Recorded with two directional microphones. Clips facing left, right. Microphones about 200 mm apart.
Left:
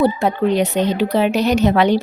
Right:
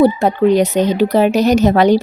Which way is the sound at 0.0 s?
40° right (ahead or behind).